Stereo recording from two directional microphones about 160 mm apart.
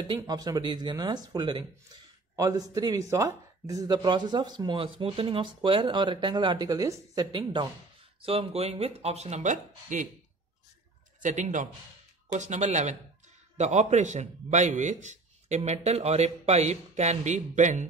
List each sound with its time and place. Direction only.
0.0 s a man's voice: 25° right (ahead or behind); by 10.0 s 50° right (ahead or behind)
11.2 s a man's voice: 50° right (ahead or behind)